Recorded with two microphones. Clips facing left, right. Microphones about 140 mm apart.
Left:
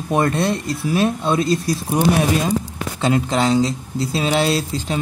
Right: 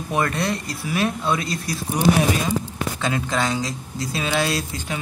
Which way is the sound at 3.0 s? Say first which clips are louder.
Left 6 dB; 30° left (ahead or behind).